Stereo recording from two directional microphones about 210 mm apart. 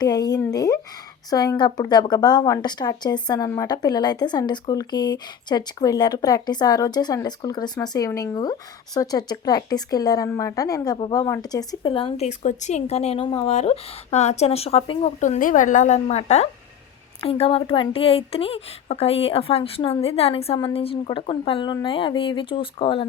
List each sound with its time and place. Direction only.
0.0 s a woman's voice: 20° left (ahead or behind)